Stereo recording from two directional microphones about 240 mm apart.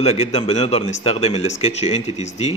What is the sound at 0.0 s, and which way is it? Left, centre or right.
A man's voice, left.